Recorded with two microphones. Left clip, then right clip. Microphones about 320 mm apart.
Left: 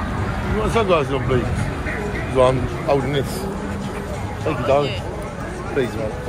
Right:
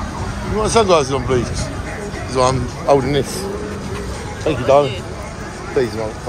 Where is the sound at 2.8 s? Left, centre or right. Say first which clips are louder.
Right 6 dB; right.